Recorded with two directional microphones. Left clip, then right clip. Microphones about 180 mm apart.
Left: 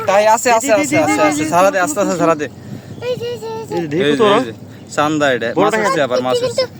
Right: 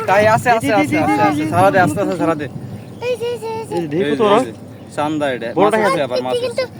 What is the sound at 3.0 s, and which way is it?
Speech, 20° left (ahead or behind).